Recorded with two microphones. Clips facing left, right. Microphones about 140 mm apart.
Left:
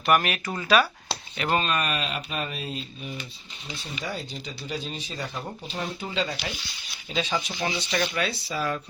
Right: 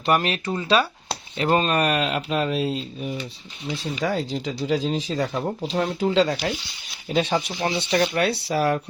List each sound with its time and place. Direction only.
0.0 s speech: 30° right (ahead or behind)
1.8 s speech: 75° right (ahead or behind)
7.1 s speech: 60° right (ahead or behind)
7.9 s speech: 40° right (ahead or behind)
8.2 s speech: 65° right (ahead or behind)